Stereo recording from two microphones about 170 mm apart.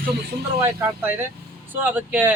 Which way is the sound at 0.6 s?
15° right (ahead or behind).